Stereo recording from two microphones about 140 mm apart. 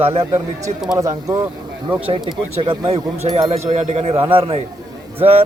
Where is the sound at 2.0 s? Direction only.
40° right (ahead or behind).